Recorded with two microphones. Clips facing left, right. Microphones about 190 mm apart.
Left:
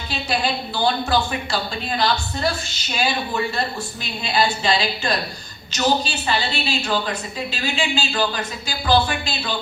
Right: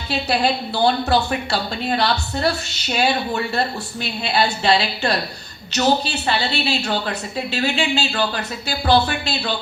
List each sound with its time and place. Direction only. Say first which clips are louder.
0.1 s a woman's voice: right 4 dB; 65° right (ahead or behind)